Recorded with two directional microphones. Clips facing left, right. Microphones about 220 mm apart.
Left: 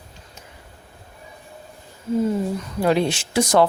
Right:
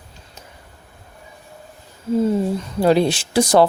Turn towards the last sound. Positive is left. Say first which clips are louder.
# right 3 dB
turn(degrees=-35)  # may be behind; listen again after turning